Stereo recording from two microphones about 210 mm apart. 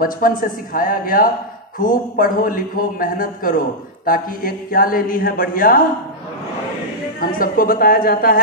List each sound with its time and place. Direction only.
0.0 s a man's voice: 40° left (ahead or behind)
7.2 s speech: 45° left (ahead or behind)